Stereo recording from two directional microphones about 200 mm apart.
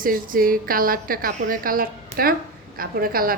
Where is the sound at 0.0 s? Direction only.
45° right (ahead or behind).